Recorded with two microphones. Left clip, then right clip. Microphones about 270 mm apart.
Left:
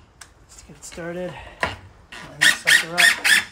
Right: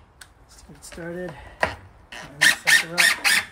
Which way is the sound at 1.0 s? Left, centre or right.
Left.